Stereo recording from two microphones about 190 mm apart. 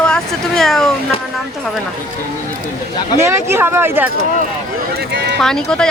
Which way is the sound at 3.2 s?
15° right (ahead or behind).